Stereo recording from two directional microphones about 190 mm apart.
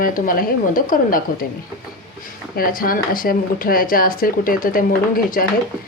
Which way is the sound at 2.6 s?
50° left (ahead or behind).